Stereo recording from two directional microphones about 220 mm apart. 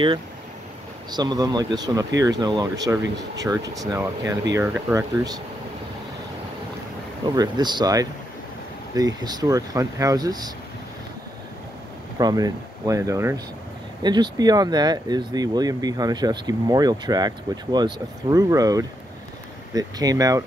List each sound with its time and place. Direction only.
1.1 s speech: 15° right (ahead or behind)
7.2 s speech: 20° right (ahead or behind)
12.2 s speech: 15° right (ahead or behind)